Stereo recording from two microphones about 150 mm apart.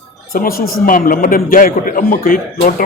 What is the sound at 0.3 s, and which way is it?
A man's voice, 75° left (ahead or behind).